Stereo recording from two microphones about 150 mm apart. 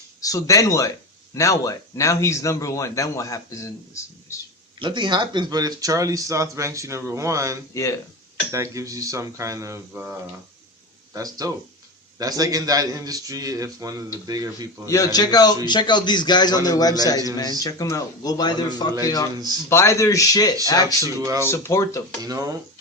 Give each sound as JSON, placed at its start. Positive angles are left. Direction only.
{"t": 0.2, "sound": "a man's voice", "side_deg": 25}
{"t": 4.8, "sound": "speech", "side_deg": -30}
{"t": 7.7, "sound": "a man's voice", "side_deg": 20}
{"t": 8.5, "sound": "speech", "side_deg": -20}
{"t": 11.1, "sound": "speech", "side_deg": -25}
{"t": 14.8, "sound": "a man's voice", "side_deg": 25}
{"t": 21.2, "sound": "speech", "side_deg": -20}
{"t": 21.5, "sound": "a man's voice", "side_deg": 15}
{"t": 22.2, "sound": "speech", "side_deg": -25}